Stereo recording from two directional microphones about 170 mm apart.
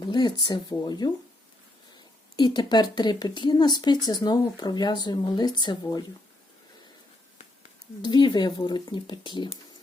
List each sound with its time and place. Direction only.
0.0 s speech: 25° left (ahead or behind)
2.3 s speech: 25° left (ahead or behind)
8.0 s speech: 25° left (ahead or behind)